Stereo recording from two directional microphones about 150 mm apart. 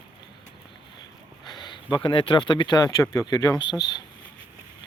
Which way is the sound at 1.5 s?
30° left (ahead or behind).